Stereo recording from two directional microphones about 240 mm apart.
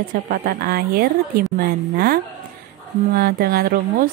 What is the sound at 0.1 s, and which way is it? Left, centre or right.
Speech, right.